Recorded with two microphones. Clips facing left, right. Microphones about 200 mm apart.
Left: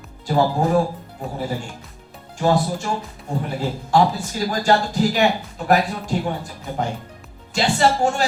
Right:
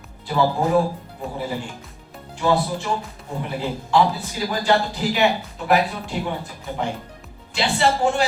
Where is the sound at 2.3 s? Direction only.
45° left (ahead or behind).